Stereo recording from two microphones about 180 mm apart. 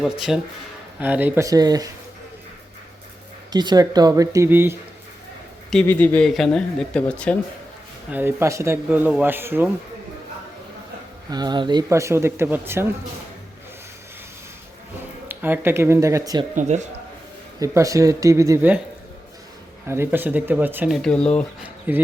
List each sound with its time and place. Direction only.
0.0 s speech: centre (ahead or behind); by 1.9 s 20° right (ahead or behind)
3.5 s speech: 25° right (ahead or behind)
5.7 s speech: 10° left (ahead or behind)
8.1 s speech: 10° right (ahead or behind)
11.3 s speech: 25° right (ahead or behind)
15.3 s speech: 10° right (ahead or behind)
16.6 s a man's voice: 40° right (ahead or behind)
17.6 s speech: 20° right (ahead or behind)
19.9 s speech: 10° right (ahead or behind)
20.9 s speech: 5° left (ahead or behind)
21.6 s speech: 10° right (ahead or behind)